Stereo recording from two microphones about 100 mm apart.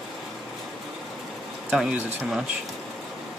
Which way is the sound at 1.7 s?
5° right (ahead or behind).